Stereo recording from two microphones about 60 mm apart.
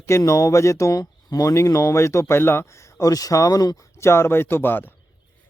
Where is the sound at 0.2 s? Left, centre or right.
Left.